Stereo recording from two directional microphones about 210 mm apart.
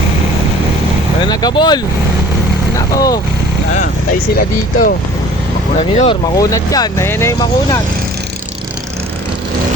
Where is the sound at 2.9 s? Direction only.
15° left (ahead or behind).